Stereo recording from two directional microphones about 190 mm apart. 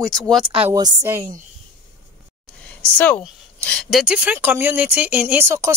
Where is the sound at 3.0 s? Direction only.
5° left (ahead or behind).